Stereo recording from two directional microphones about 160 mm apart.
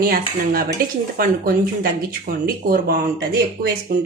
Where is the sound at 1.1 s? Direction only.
65° right (ahead or behind).